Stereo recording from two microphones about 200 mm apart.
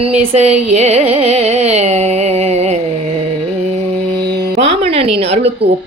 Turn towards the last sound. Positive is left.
turn(degrees=-30)  # may be behind; listen again after turning